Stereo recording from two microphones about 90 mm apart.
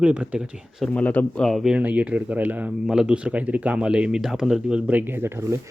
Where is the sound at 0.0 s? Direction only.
15° right (ahead or behind).